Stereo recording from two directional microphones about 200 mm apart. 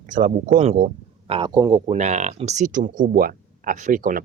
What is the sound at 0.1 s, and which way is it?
Speech, 40° right (ahead or behind).